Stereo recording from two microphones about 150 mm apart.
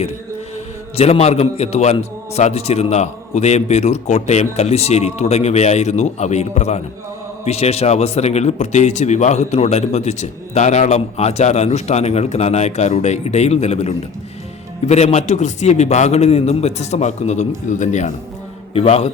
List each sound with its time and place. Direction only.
0.9 s speech: 45° left (ahead or behind)
18.7 s a man's voice: 40° left (ahead or behind)